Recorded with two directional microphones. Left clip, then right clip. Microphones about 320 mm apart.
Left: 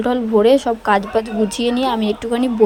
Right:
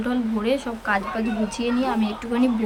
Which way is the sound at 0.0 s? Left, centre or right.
Centre.